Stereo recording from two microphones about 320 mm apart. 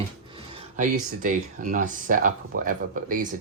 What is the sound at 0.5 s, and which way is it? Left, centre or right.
Speech, right.